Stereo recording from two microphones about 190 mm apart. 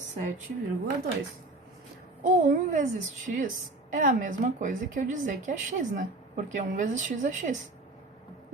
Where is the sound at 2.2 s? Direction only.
40° right (ahead or behind).